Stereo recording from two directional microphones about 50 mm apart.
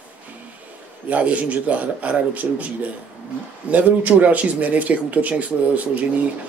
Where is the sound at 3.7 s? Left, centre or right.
Right.